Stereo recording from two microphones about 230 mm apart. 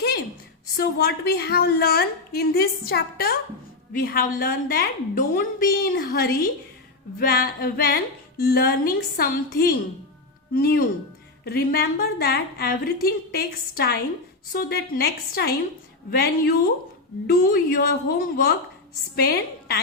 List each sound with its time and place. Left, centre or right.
0.8 s a woman's voice: left